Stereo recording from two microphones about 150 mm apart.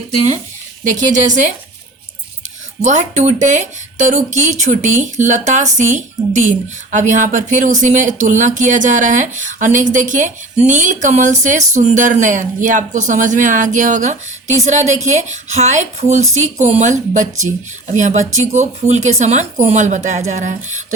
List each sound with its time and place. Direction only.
0.9 s speech: 55° right (ahead or behind)
2.8 s speech: 50° right (ahead or behind)